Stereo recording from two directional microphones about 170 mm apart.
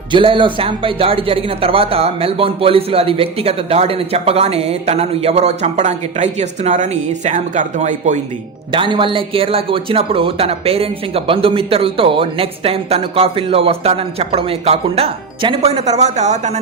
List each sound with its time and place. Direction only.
0.1 s speech: 30° right (ahead or behind)
8.7 s speech: 30° right (ahead or behind)